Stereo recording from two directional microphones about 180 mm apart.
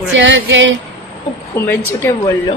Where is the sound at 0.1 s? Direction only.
90° right.